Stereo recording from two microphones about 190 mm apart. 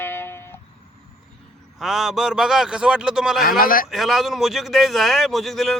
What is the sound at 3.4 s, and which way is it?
Speech, 50° left (ahead or behind).